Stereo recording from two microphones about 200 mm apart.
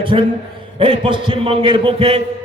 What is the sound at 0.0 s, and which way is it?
A man's voice, 25° right (ahead or behind).